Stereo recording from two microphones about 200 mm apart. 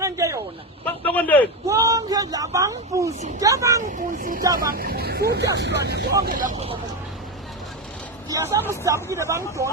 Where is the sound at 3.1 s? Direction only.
35° right (ahead or behind).